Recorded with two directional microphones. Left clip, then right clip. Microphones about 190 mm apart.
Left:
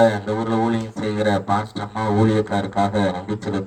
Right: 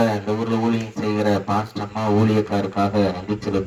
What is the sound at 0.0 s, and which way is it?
Speech, 20° right (ahead or behind).